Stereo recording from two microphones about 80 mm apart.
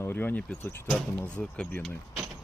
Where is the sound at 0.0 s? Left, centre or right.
Left.